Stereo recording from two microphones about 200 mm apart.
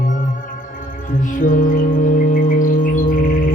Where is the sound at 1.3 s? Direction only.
40° left (ahead or behind).